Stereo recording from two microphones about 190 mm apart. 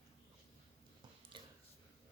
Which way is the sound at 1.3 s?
25° right (ahead or behind).